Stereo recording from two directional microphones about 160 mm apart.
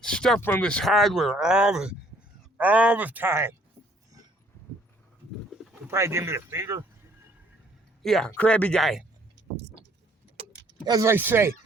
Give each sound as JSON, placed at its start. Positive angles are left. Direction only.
{"t": 0.0, "sound": "speech", "side_deg": 5}
{"t": 5.5, "sound": "pigeon", "side_deg": 0}
{"t": 5.9, "sound": "speech", "side_deg": -15}
{"t": 8.0, "sound": "speech", "side_deg": 0}
{"t": 10.8, "sound": "speech", "side_deg": -20}